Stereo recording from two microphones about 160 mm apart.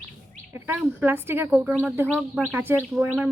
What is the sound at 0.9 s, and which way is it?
A woman's voice, 15° right (ahead or behind).